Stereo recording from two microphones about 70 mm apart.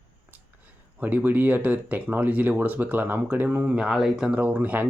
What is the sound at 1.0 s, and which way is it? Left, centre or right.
Speech, right.